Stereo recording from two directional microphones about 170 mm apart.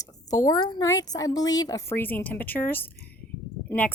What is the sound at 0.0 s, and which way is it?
A woman's voice, 20° left (ahead or behind).